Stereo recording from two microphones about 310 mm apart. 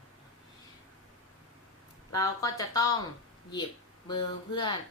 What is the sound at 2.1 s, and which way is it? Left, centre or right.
Speech, centre.